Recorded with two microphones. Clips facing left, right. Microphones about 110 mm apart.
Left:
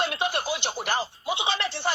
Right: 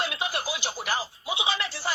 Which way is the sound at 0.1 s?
55° left (ahead or behind).